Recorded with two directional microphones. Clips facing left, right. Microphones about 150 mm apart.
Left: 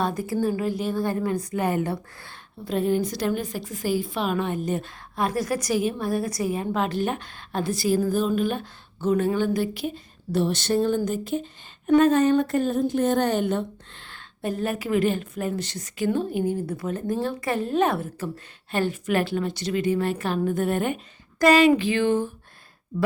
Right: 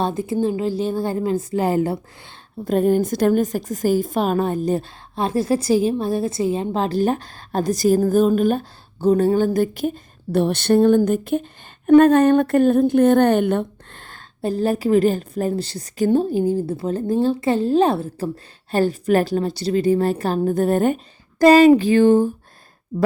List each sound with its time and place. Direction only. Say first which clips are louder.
0.0 s a woman's voice: right 4 dB; 25° right (ahead or behind)
2.6 s a woman's voice: right 6 dB; 45° right (ahead or behind)